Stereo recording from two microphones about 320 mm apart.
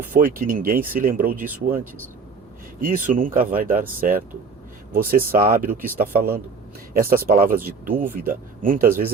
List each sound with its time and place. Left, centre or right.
0.1 s speech: right